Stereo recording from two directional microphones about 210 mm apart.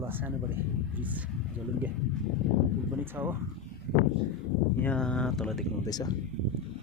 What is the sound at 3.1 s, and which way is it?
Speech, 10° right (ahead or behind).